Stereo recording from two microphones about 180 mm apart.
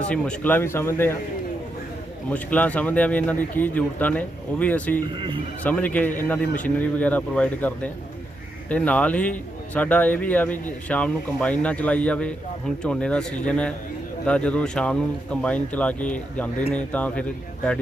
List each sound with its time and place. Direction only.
0.0 s a man's voice: 5° left (ahead or behind)
2.3 s a man's voice: 10° left (ahead or behind)
5.1 s speech: 30° right (ahead or behind)
5.6 s a man's voice: 10° left (ahead or behind)
8.7 s a man's voice: 5° left (ahead or behind)